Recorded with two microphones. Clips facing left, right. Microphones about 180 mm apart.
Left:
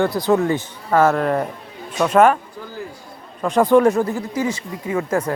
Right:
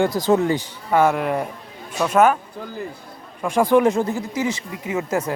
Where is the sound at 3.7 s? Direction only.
20° right (ahead or behind).